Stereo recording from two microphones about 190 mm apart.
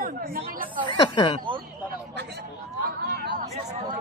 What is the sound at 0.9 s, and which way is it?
Speech, 25° left (ahead or behind).